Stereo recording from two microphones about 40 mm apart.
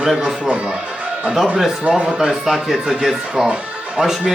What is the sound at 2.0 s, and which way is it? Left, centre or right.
Speech, centre.